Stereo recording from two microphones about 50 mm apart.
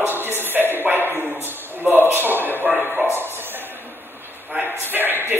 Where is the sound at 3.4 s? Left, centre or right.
Right.